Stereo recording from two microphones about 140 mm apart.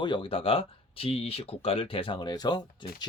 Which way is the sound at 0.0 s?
35° left (ahead or behind).